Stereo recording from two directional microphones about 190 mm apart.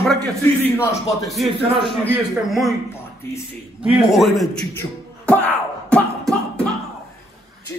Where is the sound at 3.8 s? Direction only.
Centre (ahead or behind).